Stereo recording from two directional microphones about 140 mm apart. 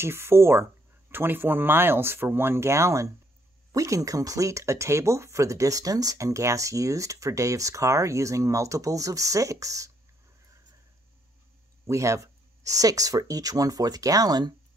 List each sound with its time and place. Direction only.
0.0 s speech: 20° right (ahead or behind)
11.8 s speech: 20° right (ahead or behind)